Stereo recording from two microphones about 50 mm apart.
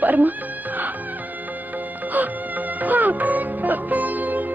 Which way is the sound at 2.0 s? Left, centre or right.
Right.